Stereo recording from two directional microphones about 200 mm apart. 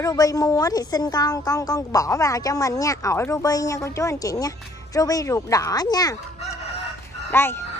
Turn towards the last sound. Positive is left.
turn(degrees=10)  # may be behind; listen again after turning